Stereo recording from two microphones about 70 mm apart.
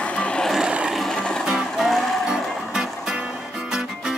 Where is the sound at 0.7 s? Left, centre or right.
Centre.